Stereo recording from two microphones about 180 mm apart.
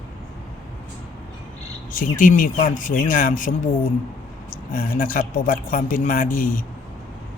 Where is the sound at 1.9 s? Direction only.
50° left (ahead or behind).